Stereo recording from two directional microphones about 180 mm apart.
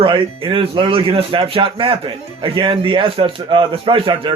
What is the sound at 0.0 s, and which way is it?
Speech, 30° right (ahead or behind).